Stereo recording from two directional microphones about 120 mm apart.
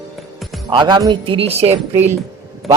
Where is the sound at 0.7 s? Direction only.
40° right (ahead or behind); by 1.7 s 60° right (ahead or behind).